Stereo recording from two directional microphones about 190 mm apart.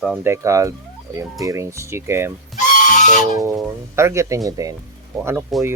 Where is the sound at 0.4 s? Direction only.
15° right (ahead or behind).